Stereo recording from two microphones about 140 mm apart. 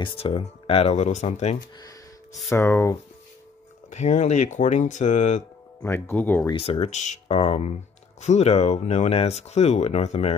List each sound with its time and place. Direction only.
0.0 s speech: 40° left (ahead or behind)
2.5 s speech: 20° left (ahead or behind)
3.9 s speech: 55° left (ahead or behind)
5.8 s speech: 15° left (ahead or behind)
6.5 s speech: 45° left (ahead or behind)